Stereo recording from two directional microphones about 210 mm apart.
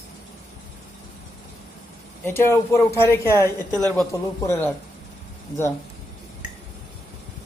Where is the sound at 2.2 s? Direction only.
10° left (ahead or behind).